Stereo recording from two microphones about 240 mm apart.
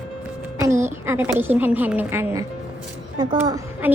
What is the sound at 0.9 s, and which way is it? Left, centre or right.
A woman's voice, centre.